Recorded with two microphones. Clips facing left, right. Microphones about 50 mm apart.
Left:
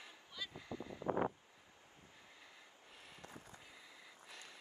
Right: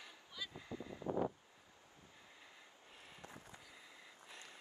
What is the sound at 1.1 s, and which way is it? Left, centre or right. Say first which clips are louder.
Wind noise: left 1 dB; left.